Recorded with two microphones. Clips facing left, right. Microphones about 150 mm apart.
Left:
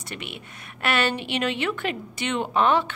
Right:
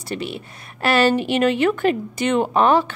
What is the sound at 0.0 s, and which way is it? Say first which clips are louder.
A woman's voice: right 9 dB; 35° right (ahead or behind).